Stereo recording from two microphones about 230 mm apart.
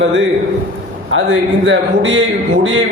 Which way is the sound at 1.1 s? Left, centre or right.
Right.